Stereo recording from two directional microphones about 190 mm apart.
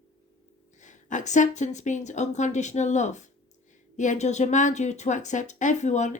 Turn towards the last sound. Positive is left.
turn(degrees=40)  # may be behind; listen again after turning